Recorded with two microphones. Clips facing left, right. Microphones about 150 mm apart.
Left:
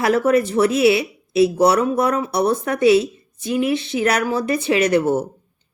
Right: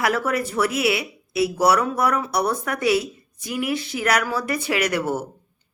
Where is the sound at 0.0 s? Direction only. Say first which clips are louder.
Left 6 dB; 25° left (ahead or behind).